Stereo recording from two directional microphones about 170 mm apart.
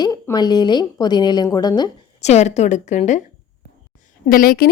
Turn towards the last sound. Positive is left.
turn(degrees=60)  # may be behind; listen again after turning